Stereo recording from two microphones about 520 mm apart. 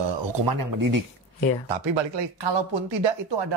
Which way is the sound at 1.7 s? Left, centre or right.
Right.